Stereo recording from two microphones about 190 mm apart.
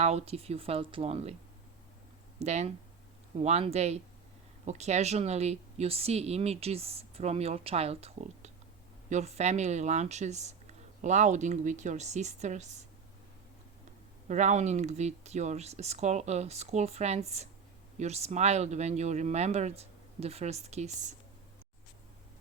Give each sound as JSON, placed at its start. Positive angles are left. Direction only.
{"t": 0.0, "sound": "speech", "side_deg": -35}
{"t": 2.4, "sound": "speech", "side_deg": -35}
{"t": 14.3, "sound": "speech", "side_deg": -40}